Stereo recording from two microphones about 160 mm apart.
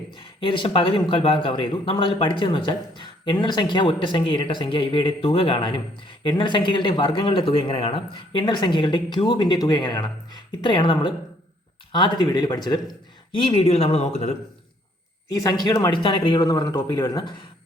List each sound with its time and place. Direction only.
0.1 s speech: 30° left (ahead or behind)
13.5 s speech: 40° left (ahead or behind)
15.3 s speech: 25° left (ahead or behind)